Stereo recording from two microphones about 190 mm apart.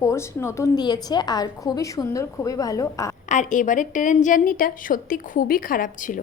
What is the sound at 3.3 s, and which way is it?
A woman's voice, 40° left (ahead or behind).